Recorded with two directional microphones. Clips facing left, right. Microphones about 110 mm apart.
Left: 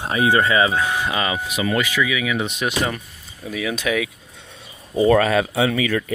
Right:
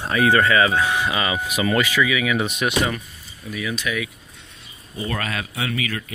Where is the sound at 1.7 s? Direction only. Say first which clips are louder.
Right 1 dB; 15° left (ahead or behind); by 2.9 s 30° left (ahead or behind).